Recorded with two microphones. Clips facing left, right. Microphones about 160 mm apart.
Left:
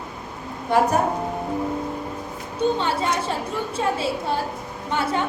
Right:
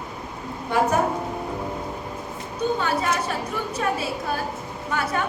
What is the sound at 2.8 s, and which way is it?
A woman's voice, 25° left (ahead or behind).